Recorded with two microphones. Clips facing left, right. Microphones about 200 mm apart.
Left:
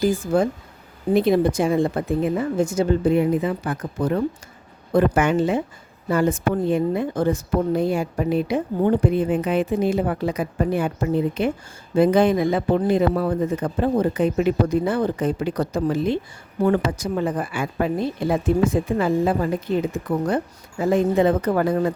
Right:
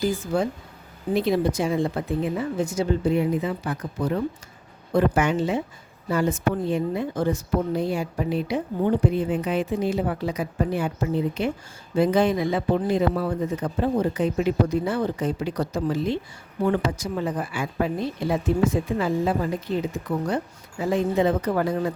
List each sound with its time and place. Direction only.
0.0 s a woman's voice: 50° left (ahead or behind)